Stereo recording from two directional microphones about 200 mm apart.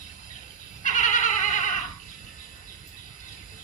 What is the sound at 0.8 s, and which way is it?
Cat, 40° left (ahead or behind).